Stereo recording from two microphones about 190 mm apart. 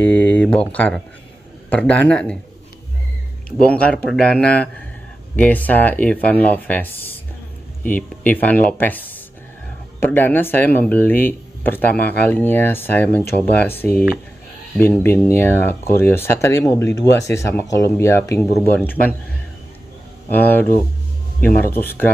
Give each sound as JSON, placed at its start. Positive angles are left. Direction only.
{"t": 0.0, "sound": "a sound", "side_deg": 5}
{"t": 0.7, "sound": "a man's voice", "side_deg": 5}
{"t": 3.5, "sound": "a man's voice", "side_deg": 5}
{"t": 20.2, "sound": "speech", "side_deg": 10}